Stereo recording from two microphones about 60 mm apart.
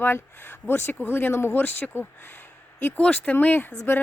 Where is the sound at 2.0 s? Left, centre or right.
Left.